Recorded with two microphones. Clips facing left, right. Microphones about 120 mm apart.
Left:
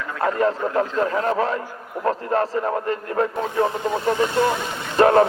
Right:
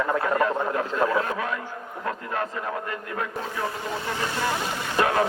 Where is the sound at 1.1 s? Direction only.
40° left (ahead or behind).